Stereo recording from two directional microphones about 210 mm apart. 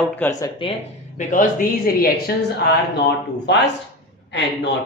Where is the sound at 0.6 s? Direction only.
30° left (ahead or behind).